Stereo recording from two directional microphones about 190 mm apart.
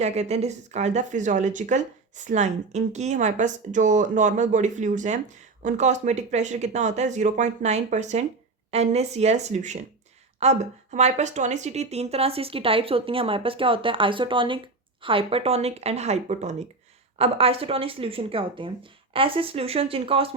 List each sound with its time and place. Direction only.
0.0 s a woman's voice: 35° right (ahead or behind)